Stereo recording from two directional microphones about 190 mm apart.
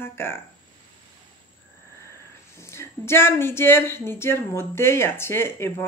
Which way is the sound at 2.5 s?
15° left (ahead or behind).